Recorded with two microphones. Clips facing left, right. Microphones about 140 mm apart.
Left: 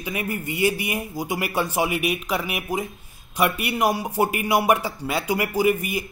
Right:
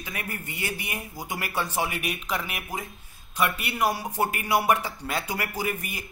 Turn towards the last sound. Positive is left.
turn(degrees=10)  # may be behind; listen again after turning